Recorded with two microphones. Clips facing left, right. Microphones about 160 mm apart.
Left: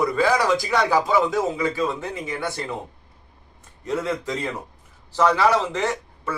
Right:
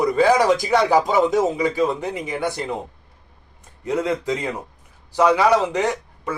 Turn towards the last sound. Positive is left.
turn(degrees=-15)  # may be behind; listen again after turning